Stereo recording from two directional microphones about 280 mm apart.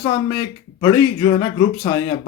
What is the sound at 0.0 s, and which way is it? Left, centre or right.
Speech, centre.